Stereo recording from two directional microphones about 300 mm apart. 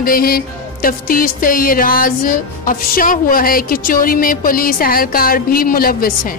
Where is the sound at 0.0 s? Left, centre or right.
Left.